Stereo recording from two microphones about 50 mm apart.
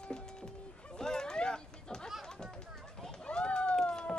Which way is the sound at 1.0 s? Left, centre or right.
Centre.